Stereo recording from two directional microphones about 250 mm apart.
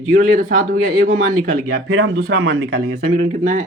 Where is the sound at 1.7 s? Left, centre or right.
Right.